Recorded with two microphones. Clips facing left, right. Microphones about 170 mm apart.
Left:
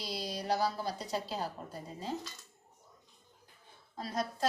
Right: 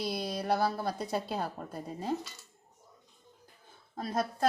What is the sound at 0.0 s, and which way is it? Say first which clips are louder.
Speech: right 5 dB; 55° right (ahead or behind).